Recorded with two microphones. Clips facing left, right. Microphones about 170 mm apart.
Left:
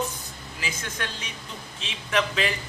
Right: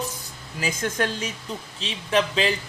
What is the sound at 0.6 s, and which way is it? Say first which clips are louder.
Speech: right 9 dB; 45° right (ahead or behind).